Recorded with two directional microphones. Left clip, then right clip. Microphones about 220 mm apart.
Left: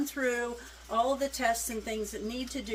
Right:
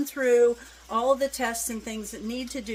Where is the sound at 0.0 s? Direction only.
45° right (ahead or behind).